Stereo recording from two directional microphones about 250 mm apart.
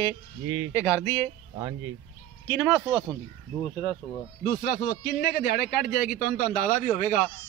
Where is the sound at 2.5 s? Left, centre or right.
Centre.